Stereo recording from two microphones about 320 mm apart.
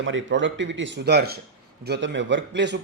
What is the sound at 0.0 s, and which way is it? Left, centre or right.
Speech, right.